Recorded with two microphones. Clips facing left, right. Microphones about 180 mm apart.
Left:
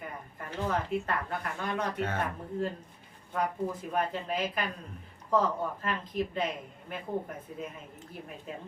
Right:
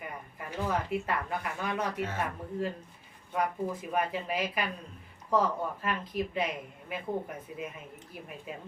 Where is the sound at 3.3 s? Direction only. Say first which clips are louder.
Even; 5° right (ahead or behind).